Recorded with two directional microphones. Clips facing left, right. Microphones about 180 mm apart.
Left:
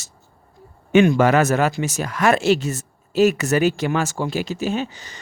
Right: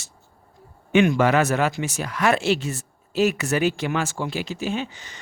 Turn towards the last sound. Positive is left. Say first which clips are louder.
# left 3 dB
turn(degrees=40)  # may be behind; listen again after turning